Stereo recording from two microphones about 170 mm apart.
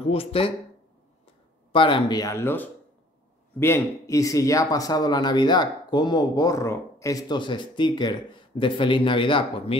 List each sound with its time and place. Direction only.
0.1 s speech: 35° left (ahead or behind)
1.7 s a man's voice: 30° left (ahead or behind)